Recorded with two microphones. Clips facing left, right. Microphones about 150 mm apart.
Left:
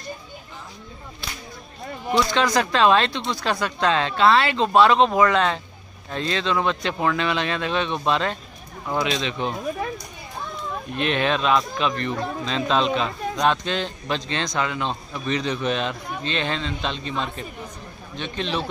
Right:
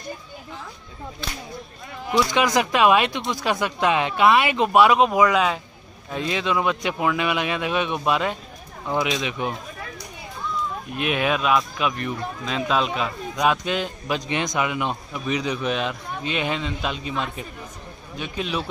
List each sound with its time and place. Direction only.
2.1 s speech: 15° right (ahead or behind)
11.0 s speech: 10° right (ahead or behind)